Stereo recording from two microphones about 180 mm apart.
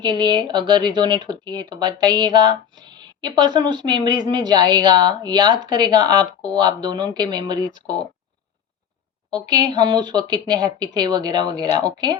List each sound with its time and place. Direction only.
0.0 s speech: 25° right (ahead or behind)
9.3 s speech: 20° right (ahead or behind)